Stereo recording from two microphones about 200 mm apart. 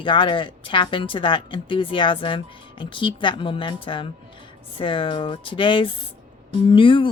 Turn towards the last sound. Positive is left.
turn(degrees=25)  # may be behind; listen again after turning